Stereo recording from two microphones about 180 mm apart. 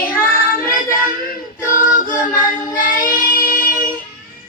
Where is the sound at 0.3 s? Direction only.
50° left (ahead or behind).